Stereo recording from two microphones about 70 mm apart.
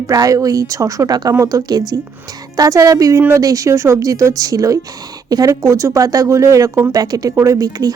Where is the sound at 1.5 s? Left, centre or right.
Right.